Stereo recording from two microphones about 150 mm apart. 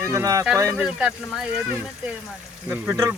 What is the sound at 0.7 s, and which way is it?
Speech, 5° right (ahead or behind).